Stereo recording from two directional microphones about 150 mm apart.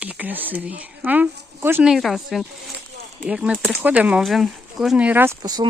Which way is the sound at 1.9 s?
Centre (ahead or behind).